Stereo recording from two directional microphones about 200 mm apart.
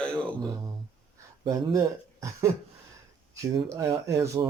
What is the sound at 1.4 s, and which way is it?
Speech, 15° right (ahead or behind).